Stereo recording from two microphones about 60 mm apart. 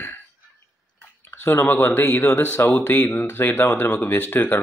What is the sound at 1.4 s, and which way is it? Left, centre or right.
Speech, left.